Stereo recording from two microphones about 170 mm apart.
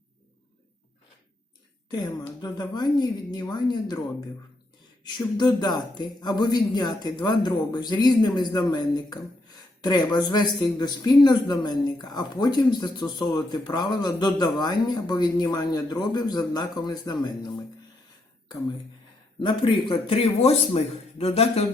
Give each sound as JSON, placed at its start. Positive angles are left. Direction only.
{"t": 1.9, "sound": "speech", "side_deg": 25}
{"t": 5.0, "sound": "speech", "side_deg": 25}
{"t": 19.4, "sound": "speech", "side_deg": 30}